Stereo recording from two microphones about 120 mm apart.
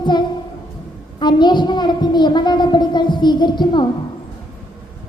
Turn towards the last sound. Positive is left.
turn(degrees=40)  # may be behind; listen again after turning